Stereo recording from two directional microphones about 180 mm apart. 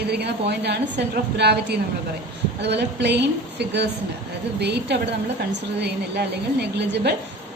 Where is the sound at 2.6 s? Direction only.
70° right (ahead or behind).